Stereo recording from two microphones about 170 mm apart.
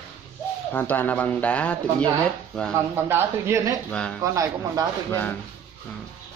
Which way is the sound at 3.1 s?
15° right (ahead or behind).